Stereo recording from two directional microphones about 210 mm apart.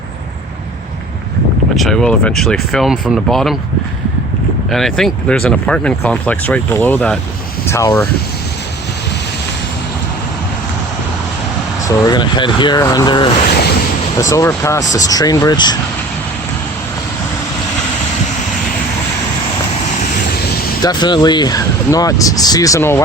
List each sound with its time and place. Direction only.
1.7 s speech: centre (ahead or behind)
4.7 s speech: centre (ahead or behind)
12.0 s speech: 20° left (ahead or behind)
20.8 s speech: 20° left (ahead or behind)